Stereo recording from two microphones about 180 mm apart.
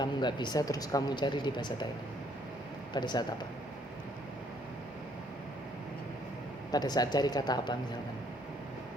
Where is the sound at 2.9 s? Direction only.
25° left (ahead or behind).